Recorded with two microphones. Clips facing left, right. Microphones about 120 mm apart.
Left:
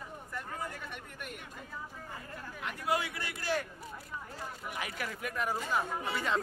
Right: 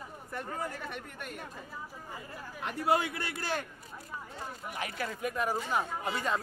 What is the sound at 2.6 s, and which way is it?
Speech, 30° right (ahead or behind).